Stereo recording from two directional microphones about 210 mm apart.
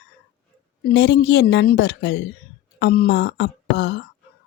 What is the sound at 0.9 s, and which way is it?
Speech, 55° left (ahead or behind).